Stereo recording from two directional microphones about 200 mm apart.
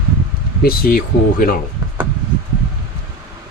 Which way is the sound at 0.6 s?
50° left (ahead or behind).